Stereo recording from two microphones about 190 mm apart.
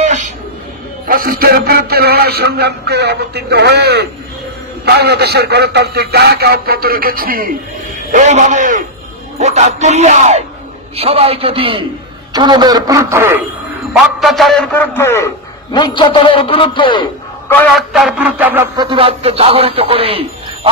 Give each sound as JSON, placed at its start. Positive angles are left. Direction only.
{"t": 0.0, "sound": "a sound", "side_deg": -40}
{"t": 1.0, "sound": "a man's voice", "side_deg": -50}
{"t": 14.2, "sound": "a man's voice", "side_deg": 0}
{"t": 17.5, "sound": "speech", "side_deg": 5}
{"t": 18.8, "sound": "speech", "side_deg": -25}